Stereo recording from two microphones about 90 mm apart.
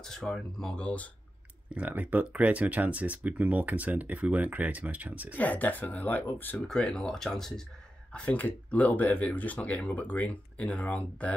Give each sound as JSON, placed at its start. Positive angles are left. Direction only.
{"t": 0.0, "sound": "speech", "side_deg": 5}
{"t": 1.7, "sound": "speech", "side_deg": -15}
{"t": 5.3, "sound": "speech", "side_deg": 20}
{"t": 6.7, "sound": "speech", "side_deg": 5}
{"t": 8.1, "sound": "speech", "side_deg": 15}